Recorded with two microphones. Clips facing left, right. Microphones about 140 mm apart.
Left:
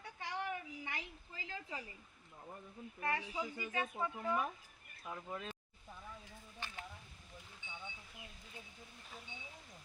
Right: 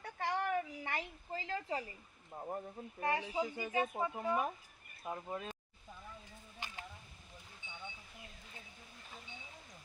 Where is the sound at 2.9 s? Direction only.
25° right (ahead or behind).